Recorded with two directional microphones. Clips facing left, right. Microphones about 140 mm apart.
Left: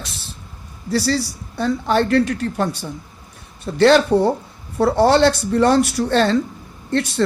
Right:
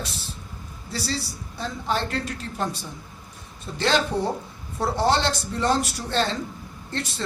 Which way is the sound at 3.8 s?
65° left (ahead or behind).